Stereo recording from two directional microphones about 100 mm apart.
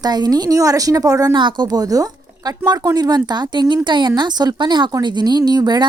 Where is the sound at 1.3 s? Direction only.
50° right (ahead or behind).